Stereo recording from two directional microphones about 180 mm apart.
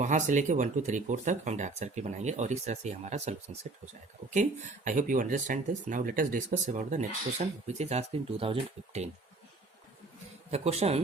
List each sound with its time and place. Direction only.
0.0 s speech: 40° right (ahead or behind)
10.5 s speech: 35° right (ahead or behind)